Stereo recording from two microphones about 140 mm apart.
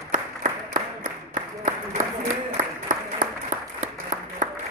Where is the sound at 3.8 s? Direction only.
65° right (ahead or behind).